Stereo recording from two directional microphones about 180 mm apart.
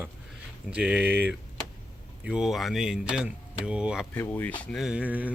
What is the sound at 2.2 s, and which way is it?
Speech, 5° right (ahead or behind).